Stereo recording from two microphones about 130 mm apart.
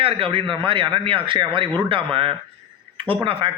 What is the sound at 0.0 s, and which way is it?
A man's voice, 45° right (ahead or behind).